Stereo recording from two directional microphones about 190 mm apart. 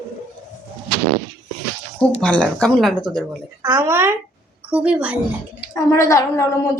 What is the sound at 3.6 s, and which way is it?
A child's voice, 15° right (ahead or behind).